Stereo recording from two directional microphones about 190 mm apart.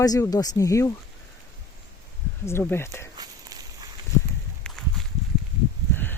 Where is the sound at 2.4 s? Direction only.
10° left (ahead or behind).